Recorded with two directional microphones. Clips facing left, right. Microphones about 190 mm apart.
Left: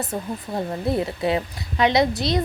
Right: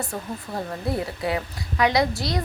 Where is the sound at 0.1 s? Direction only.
20° left (ahead or behind).